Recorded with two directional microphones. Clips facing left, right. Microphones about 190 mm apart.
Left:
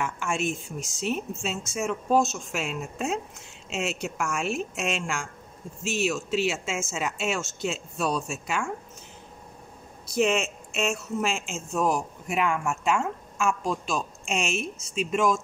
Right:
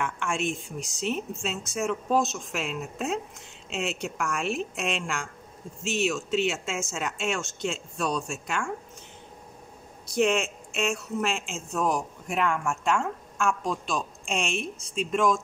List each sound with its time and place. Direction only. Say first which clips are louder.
0.0 s a woman's voice: left 1 dB; centre (ahead or behind)
10.1 s a woman's voice: even; centre (ahead or behind)